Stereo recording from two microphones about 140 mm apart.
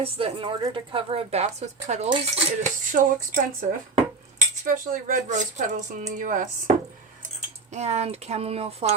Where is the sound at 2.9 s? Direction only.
65° right (ahead or behind).